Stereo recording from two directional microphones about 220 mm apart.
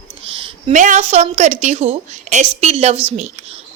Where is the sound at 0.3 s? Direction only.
25° right (ahead or behind).